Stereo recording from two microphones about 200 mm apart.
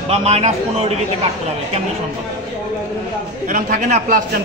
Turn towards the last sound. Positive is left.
turn(degrees=-40)  # may be behind; listen again after turning